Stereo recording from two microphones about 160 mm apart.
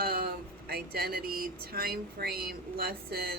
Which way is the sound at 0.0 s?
70° right (ahead or behind).